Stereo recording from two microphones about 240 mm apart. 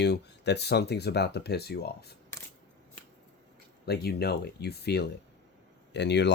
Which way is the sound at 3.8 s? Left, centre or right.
Left.